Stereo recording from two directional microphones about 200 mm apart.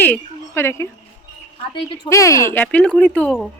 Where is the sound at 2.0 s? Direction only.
15° left (ahead or behind).